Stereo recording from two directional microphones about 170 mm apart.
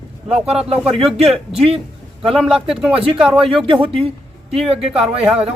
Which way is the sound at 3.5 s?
30° right (ahead or behind).